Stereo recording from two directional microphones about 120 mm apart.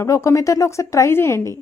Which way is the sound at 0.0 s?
25° left (ahead or behind).